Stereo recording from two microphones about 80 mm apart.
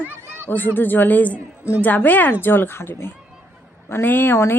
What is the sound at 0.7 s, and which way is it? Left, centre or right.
Speech, left.